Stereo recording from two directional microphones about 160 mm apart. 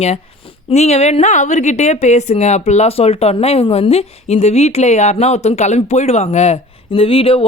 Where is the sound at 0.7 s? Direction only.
40° left (ahead or behind).